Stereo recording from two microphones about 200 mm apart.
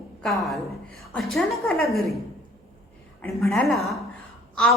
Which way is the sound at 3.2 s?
5° left (ahead or behind).